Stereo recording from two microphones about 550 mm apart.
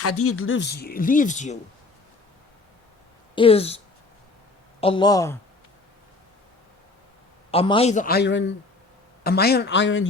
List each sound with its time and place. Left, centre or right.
0.0 s speech: left
3.3 s speech: centre
4.8 s speech: centre
7.5 s speech: centre